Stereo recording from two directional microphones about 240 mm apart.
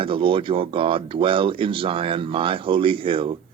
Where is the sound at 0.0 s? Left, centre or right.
Right.